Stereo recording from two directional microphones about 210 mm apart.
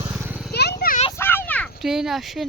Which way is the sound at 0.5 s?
50° left (ahead or behind).